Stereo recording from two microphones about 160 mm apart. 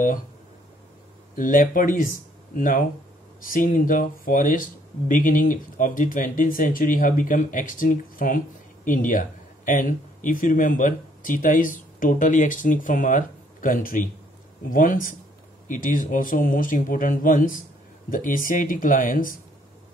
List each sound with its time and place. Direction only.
1.3 s speech: 60° left (ahead or behind)